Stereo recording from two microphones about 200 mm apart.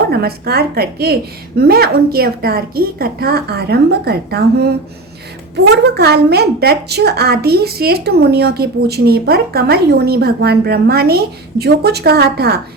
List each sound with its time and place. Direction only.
0.1 s a woman's voice: 50° right (ahead or behind)